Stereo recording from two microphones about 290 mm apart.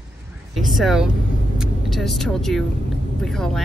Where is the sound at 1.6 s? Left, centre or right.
Centre.